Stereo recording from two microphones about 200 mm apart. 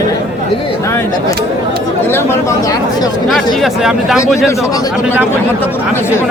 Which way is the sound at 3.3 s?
Centre (ahead or behind).